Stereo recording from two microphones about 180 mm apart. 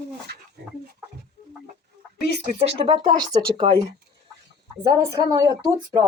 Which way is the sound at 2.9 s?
25° right (ahead or behind).